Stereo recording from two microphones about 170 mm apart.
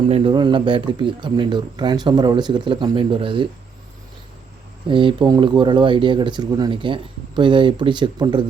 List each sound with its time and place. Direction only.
0.1 s speech: 30° right (ahead or behind)
4.9 s speech: 30° right (ahead or behind)